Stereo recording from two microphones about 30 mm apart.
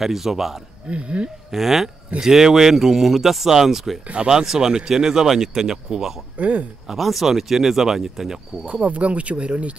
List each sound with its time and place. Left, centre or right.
0.0 s speech: centre
0.8 s speech: right
1.5 s speech: centre
4.3 s speech: centre
6.3 s speech: right
6.9 s speech: centre
8.8 s speech: right